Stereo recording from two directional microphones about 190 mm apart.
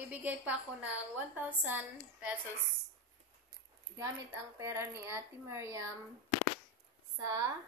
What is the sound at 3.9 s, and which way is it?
Speech, 15° right (ahead or behind).